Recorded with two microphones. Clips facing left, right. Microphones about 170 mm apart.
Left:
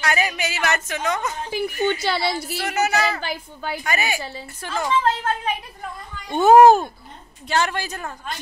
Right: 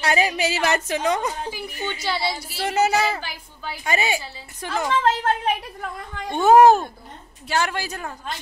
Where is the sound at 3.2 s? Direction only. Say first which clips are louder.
Left 6 dB; 55° left (ahead or behind).